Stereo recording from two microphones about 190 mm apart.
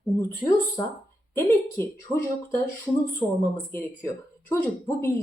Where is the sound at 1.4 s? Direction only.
15° left (ahead or behind).